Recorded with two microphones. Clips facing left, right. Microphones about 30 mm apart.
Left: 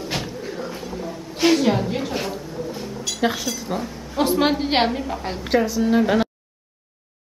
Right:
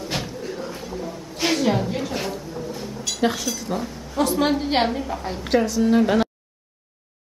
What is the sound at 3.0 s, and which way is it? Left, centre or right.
Speech, centre.